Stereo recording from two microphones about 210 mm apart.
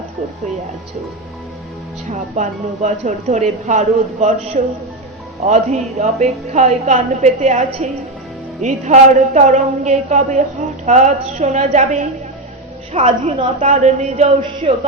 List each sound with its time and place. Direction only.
2.0 s a woman's voice: 30° right (ahead or behind)
6.2 s a woman's voice: centre (ahead or behind)
6.5 s a woman's voice: 30° right (ahead or behind)